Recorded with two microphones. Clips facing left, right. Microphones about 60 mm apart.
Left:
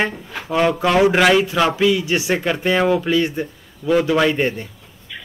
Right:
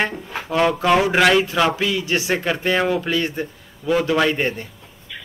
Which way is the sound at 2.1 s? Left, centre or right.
Centre.